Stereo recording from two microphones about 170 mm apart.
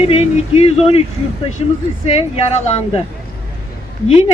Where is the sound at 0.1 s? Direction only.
35° left (ahead or behind).